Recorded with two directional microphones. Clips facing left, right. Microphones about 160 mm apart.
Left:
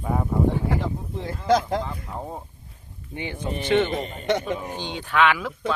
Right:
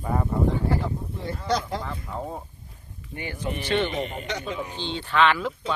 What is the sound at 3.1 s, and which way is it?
Speech, 20° left (ahead or behind).